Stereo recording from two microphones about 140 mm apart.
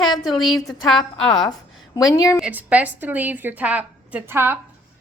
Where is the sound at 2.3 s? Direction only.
10° right (ahead or behind).